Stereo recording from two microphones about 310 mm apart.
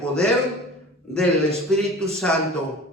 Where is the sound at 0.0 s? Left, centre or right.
Centre.